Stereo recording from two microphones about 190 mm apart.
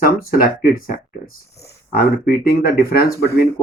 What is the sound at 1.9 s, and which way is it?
Speech, 50° left (ahead or behind).